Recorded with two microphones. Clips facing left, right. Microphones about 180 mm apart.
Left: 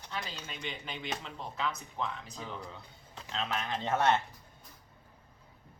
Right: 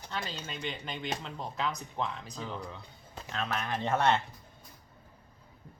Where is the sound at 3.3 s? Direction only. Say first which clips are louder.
Right 1 dB; 20° left (ahead or behind).